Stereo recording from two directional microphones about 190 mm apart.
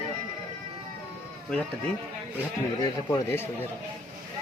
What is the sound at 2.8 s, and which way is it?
Speech, 15° left (ahead or behind).